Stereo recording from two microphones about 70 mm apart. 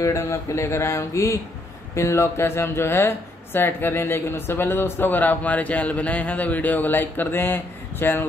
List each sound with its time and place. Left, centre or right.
0.0 s speech: left